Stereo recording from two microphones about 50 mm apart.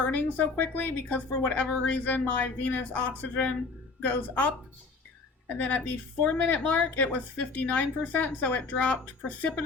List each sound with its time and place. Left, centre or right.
0.0 s speech: left
1.3 s a woman's voice: left
1.8 s speech: left